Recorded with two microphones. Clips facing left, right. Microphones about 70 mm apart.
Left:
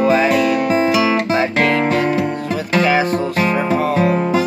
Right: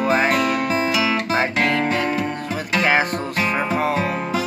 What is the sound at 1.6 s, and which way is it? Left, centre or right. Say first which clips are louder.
Music: left 4 dB; left.